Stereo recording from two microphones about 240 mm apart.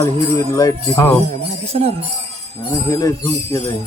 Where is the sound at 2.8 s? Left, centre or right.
Centre.